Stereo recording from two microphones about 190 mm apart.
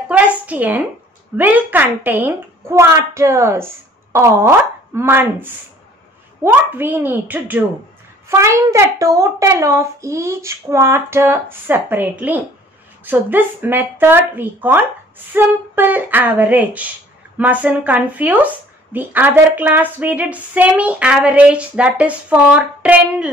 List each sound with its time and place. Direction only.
0.1 s a woman's voice: 10° right (ahead or behind)